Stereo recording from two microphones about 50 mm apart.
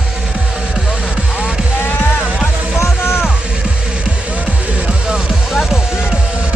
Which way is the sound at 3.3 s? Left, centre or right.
Right.